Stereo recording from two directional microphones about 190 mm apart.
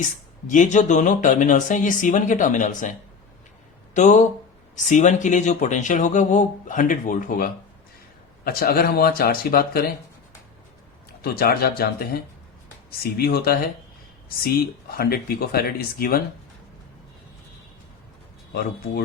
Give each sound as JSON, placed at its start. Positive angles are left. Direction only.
{"t": 0.4, "sound": "speech", "side_deg": 40}
{"t": 3.9, "sound": "speech", "side_deg": 40}
{"t": 11.2, "sound": "speech", "side_deg": 55}